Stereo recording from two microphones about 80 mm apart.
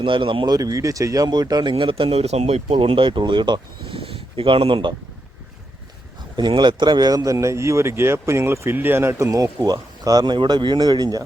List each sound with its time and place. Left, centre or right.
0.0 s speech: right
0.5 s speech: right
6.3 s speech: right
7.3 s speech: right
9.2 s speech: right
10.3 s speech: right